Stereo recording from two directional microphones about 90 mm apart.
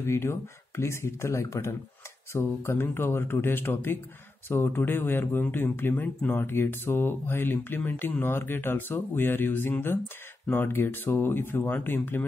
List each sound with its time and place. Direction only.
0.0 s speech: 30° left (ahead or behind)